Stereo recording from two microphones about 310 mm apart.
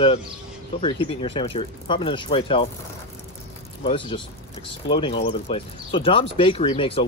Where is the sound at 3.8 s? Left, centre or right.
Centre.